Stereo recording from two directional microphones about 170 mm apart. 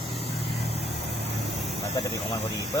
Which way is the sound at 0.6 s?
75° right (ahead or behind).